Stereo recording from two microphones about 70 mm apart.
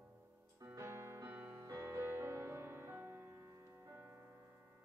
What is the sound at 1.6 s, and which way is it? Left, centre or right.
Music, right.